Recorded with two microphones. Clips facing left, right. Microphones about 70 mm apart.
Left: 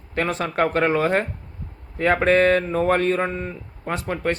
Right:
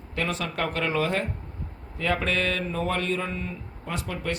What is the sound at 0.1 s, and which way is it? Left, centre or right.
Speech, left.